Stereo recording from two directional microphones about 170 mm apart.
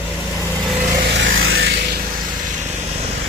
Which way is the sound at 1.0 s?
90° right.